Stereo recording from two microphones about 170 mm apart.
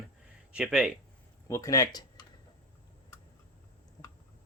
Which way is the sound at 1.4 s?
15° left (ahead or behind).